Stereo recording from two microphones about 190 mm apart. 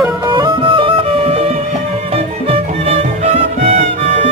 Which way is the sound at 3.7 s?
40° right (ahead or behind).